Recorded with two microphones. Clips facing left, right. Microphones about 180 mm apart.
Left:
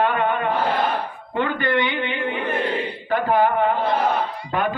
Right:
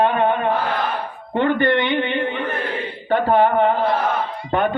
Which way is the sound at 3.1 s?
30° right (ahead or behind).